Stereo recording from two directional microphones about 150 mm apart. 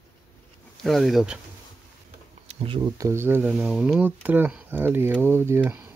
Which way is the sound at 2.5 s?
40° right (ahead or behind).